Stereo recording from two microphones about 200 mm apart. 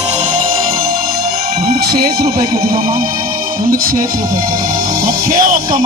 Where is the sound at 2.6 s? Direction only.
45° right (ahead or behind).